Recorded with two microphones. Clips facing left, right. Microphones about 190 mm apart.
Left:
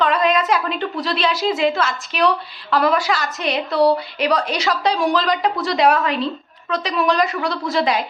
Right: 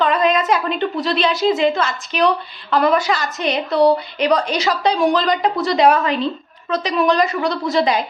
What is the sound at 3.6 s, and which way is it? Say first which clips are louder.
Speech: right 2 dB; 20° right (ahead or behind).